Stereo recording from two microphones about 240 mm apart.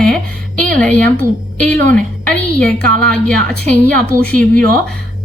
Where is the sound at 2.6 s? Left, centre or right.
Centre.